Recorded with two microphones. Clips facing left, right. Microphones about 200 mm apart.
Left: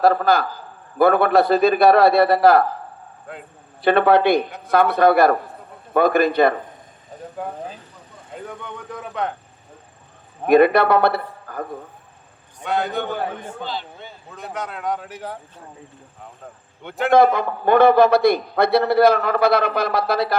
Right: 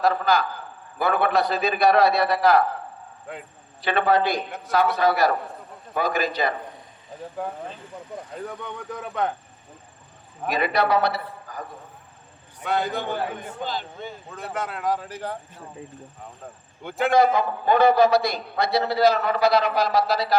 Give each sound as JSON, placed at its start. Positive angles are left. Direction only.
{"t": 0.0, "sound": "a man's voice", "side_deg": 55}
{"t": 3.3, "sound": "speech", "side_deg": 0}
{"t": 3.8, "sound": "a man's voice", "side_deg": 55}
{"t": 8.9, "sound": "speech", "side_deg": 0}
{"t": 10.4, "sound": "a man's voice", "side_deg": 55}
{"t": 12.6, "sound": "speech", "side_deg": 0}
{"t": 13.6, "sound": "speech", "side_deg": -45}
{"t": 14.3, "sound": "speech", "side_deg": 0}
{"t": 16.8, "sound": "speech", "side_deg": 0}
{"t": 17.1, "sound": "a man's voice", "side_deg": 55}